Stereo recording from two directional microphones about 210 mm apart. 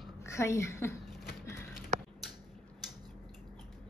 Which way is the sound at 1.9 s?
35° right (ahead or behind).